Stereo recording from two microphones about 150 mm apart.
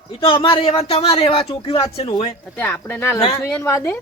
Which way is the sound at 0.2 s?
35° left (ahead or behind).